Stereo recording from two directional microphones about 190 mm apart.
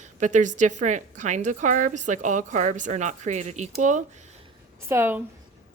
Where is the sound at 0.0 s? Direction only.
40° right (ahead or behind).